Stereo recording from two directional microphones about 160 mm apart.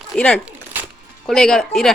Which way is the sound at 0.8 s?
10° right (ahead or behind).